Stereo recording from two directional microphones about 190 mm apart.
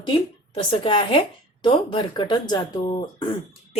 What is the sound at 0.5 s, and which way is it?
Speech, 30° left (ahead or behind).